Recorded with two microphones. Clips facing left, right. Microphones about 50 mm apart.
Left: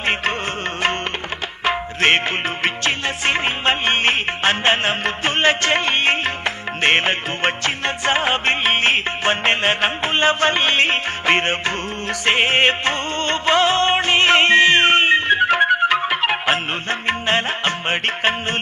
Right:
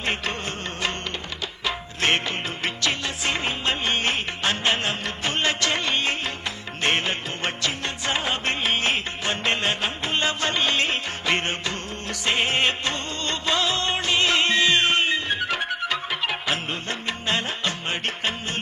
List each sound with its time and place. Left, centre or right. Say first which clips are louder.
0.0 s music of bollywood: left 6 dB; left
1.6 s music: left 7 dB; left